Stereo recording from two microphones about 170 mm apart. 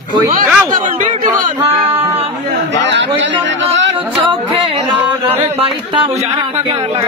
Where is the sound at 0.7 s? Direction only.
50° right (ahead or behind).